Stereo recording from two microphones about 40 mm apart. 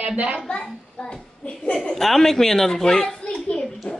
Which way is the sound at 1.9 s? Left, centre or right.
Centre.